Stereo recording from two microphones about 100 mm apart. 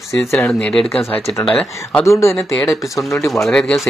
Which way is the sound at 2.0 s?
30° left (ahead or behind).